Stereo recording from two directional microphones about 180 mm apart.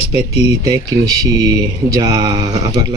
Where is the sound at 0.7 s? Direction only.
20° right (ahead or behind).